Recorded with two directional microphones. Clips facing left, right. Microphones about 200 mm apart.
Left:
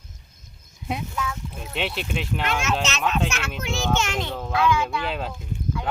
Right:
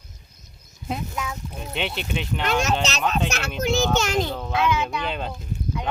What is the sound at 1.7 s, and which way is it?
Speech, centre (ahead or behind).